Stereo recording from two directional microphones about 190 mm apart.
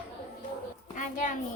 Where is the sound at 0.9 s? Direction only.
40° left (ahead or behind).